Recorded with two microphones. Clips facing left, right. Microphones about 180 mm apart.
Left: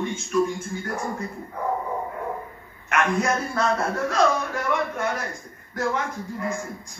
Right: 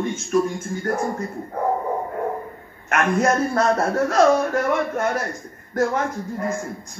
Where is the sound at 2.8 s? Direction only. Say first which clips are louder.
Right 4 dB; 45° right (ahead or behind).